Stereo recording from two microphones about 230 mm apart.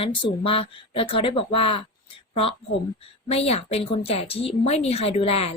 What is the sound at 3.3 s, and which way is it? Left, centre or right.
A woman's voice, left.